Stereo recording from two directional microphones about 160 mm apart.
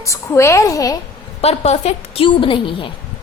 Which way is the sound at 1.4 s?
40° left (ahead or behind).